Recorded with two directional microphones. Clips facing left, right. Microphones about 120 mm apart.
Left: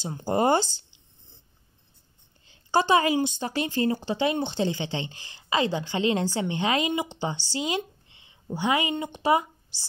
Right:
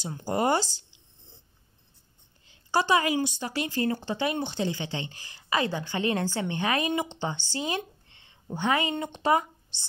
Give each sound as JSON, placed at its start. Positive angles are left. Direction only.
{"t": 0.0, "sound": "a woman's voice", "side_deg": 25}
{"t": 2.4, "sound": "a woman's voice", "side_deg": 25}
{"t": 7.5, "sound": "a sound", "side_deg": 15}
{"t": 8.5, "sound": "speech", "side_deg": 15}